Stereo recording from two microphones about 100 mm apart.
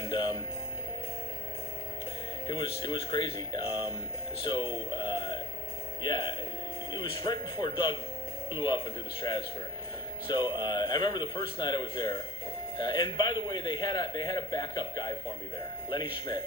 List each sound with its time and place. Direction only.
0.0 s music: 65° left (ahead or behind)
2.5 s a man's voice: 60° left (ahead or behind)